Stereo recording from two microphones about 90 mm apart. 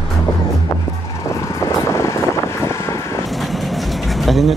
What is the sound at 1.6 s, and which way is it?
Vehicle, 35° left (ahead or behind).